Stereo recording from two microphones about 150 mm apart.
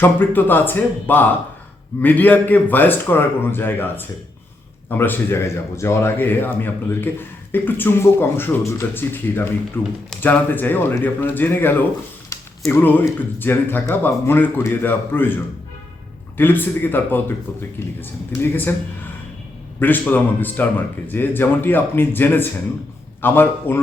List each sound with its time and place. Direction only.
0.0 s speech: 15° left (ahead or behind)
16.4 s speech: 15° left (ahead or behind)
19.8 s speech: 10° left (ahead or behind)